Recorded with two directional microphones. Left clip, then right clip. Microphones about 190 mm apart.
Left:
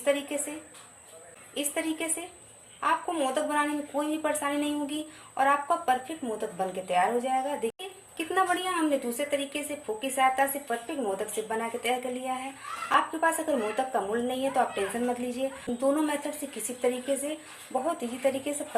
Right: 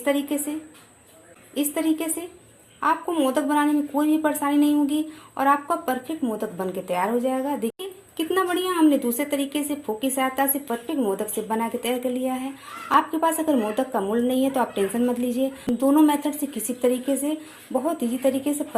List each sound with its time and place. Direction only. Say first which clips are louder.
0.0 s a woman's voice: right 4 dB; 35° right (ahead or behind)
1.7 s a woman's voice: right 7 dB; 35° right (ahead or behind)